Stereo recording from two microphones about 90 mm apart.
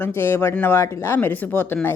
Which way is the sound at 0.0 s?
25° left (ahead or behind).